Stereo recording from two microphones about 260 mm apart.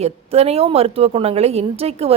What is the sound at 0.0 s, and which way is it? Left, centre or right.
A woman's voice, right.